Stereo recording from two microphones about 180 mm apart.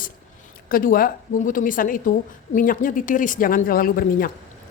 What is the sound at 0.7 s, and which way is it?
A woman's voice, 50° left (ahead or behind).